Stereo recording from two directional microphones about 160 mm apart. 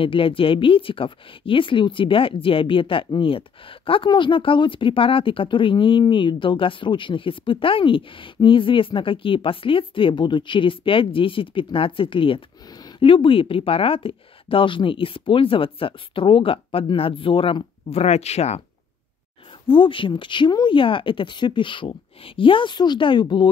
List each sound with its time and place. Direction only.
0.0 s speech: 35° left (ahead or behind)
19.7 s speech: 35° left (ahead or behind)